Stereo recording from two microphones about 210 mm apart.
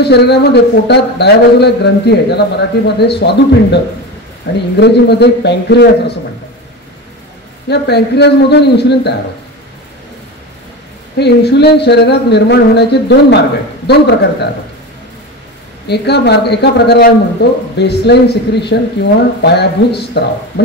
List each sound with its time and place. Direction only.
0.0 s a man's voice: 50° left (ahead or behind)
4.7 s a man's voice: 55° left (ahead or behind)
7.7 s a man's voice: 50° left (ahead or behind)
11.1 s a man's voice: 50° left (ahead or behind)
15.9 s a man's voice: 50° left (ahead or behind)